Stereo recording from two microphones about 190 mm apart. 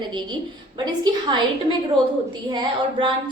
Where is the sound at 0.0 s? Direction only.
25° right (ahead or behind).